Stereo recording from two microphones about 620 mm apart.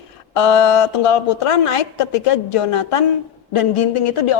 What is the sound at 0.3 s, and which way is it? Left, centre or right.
A woman's voice, left.